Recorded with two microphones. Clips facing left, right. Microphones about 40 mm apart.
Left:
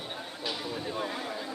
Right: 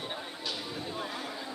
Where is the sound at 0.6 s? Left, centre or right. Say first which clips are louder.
Left 3 dB; centre.